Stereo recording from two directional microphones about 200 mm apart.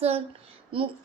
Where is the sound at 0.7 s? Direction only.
25° right (ahead or behind).